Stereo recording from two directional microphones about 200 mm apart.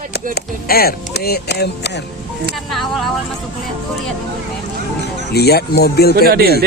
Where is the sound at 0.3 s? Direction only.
50° left (ahead or behind).